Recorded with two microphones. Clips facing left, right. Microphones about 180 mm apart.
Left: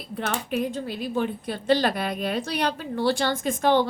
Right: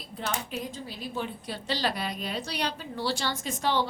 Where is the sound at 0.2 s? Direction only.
60° left (ahead or behind).